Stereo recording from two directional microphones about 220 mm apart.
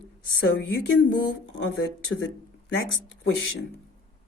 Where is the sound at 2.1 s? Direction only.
65° left (ahead or behind).